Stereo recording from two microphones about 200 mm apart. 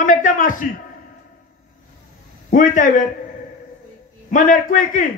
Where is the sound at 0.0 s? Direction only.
40° left (ahead or behind).